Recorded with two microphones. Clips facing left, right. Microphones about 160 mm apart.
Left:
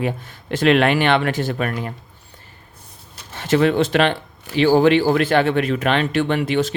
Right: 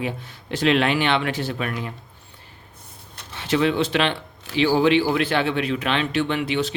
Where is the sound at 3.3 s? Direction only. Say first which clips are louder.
Left 4 dB; 45° left (ahead or behind).